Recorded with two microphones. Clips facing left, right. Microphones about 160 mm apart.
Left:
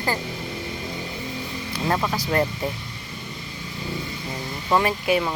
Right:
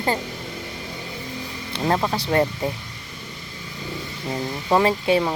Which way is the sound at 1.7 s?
30° right (ahead or behind).